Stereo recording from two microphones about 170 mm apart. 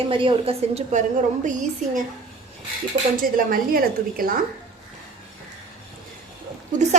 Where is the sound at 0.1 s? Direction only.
30° right (ahead or behind).